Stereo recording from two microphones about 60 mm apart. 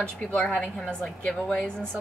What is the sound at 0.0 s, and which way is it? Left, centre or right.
A woman's voice, left.